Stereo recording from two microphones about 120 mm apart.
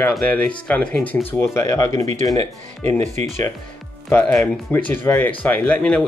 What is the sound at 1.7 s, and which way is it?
Speech, 25° left (ahead or behind).